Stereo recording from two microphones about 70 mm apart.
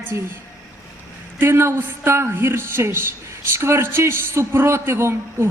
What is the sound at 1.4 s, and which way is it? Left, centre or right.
A man's voice, right.